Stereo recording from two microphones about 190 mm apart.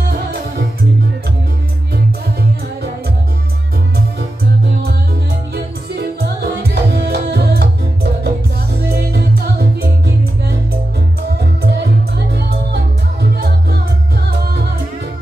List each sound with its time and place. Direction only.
0.1 s music: 55° right (ahead or behind)
5.5 s music: 55° right (ahead or behind)